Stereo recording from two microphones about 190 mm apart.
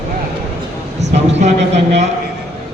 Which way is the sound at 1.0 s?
35° right (ahead or behind).